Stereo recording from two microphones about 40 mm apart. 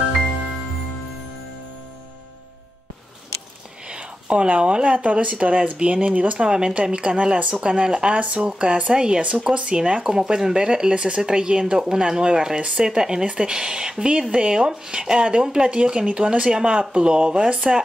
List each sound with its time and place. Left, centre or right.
3.9 s a sound: right
4.5 s speech: right
8.1 s speech: right